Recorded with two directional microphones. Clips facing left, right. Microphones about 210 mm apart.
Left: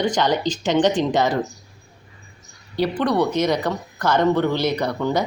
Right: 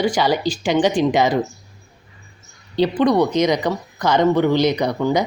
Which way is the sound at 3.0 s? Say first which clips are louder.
Right 4 dB; 15° right (ahead or behind).